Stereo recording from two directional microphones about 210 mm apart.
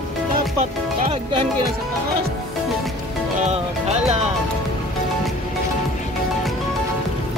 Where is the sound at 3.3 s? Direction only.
35° right (ahead or behind).